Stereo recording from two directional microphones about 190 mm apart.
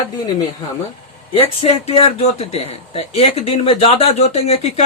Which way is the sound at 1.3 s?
30° left (ahead or behind).